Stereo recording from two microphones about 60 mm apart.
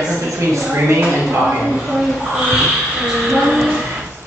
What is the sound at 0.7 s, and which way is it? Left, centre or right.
Speech, right.